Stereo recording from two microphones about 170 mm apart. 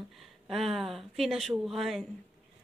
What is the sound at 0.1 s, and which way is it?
Speech, centre (ahead or behind).